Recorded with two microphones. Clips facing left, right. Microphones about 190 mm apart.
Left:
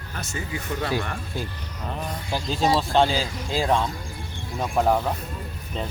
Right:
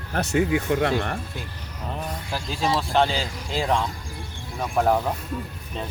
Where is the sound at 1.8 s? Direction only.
Centre (ahead or behind).